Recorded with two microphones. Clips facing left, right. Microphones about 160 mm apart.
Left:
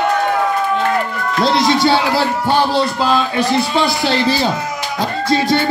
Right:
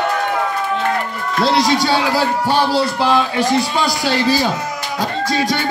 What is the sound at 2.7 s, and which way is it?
Speech, 10° right (ahead or behind).